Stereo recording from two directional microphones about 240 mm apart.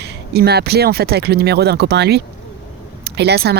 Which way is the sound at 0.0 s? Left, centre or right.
Right.